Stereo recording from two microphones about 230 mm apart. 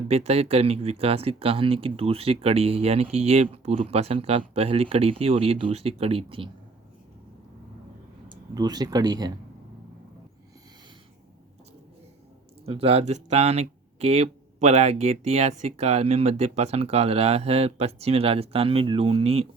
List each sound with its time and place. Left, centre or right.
0.1 s speech: right
8.5 s speech: centre
12.6 s speech: right